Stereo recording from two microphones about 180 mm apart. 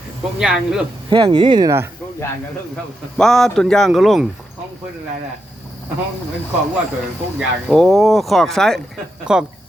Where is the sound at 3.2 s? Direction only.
Centre (ahead or behind).